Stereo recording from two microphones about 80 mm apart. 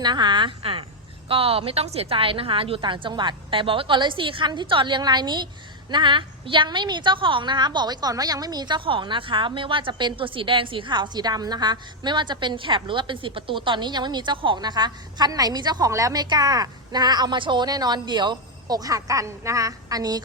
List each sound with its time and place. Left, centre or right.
0.0 s a woman's voice: right
2.1 s a woman's voice: right
5.9 s a woman's voice: right
15.9 s speech: right
16.3 s a woman's voice: right
17.7 s a woman's voice: right
18.8 s speech: right